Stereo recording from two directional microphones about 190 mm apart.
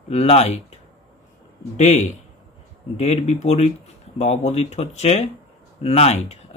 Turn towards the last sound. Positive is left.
turn(degrees=35)  # may be behind; listen again after turning